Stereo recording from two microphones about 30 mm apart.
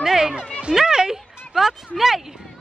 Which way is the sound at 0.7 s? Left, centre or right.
Right.